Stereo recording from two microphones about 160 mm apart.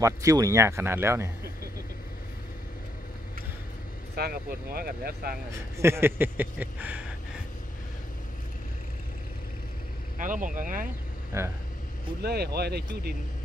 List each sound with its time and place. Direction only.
0.0 s speech: 20° right (ahead or behind)
4.2 s speech: 75° right (ahead or behind)
5.8 s speech: 15° right (ahead or behind)
10.1 s speech: 55° right (ahead or behind)
11.3 s speech: 15° right (ahead or behind)
12.2 s speech: 85° right